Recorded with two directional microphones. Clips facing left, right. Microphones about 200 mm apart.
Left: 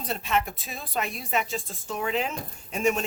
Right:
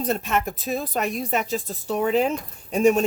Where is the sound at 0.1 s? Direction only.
45° right (ahead or behind).